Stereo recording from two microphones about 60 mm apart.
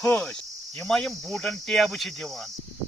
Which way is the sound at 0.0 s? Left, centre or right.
Centre.